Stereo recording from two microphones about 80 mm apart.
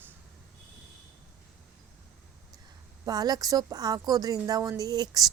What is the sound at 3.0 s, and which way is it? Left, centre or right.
A woman's voice, right.